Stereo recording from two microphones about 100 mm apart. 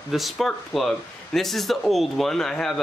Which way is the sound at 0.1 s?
Centre (ahead or behind).